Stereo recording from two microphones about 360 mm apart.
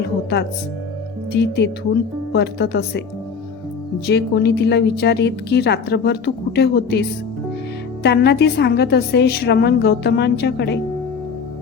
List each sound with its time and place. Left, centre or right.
1.3 s a woman's voice: left
4.0 s a woman's voice: left
8.0 s a woman's voice: left